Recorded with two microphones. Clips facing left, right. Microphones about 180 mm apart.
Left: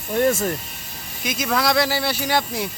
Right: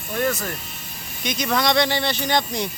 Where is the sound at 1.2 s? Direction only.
5° left (ahead or behind).